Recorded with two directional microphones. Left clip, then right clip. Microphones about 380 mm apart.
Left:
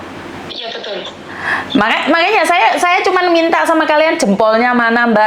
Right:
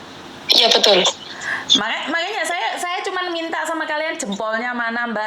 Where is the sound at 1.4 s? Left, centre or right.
Centre.